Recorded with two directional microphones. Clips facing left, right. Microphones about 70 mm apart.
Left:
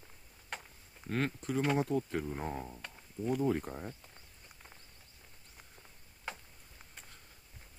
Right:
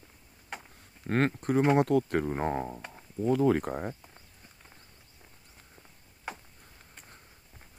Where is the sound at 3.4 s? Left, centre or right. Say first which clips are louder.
Right 7 dB; right.